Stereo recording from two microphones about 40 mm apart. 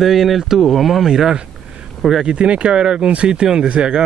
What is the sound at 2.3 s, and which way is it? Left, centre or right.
Speech, right.